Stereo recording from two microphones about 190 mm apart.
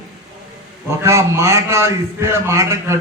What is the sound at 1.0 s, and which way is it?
A man's voice, 15° right (ahead or behind).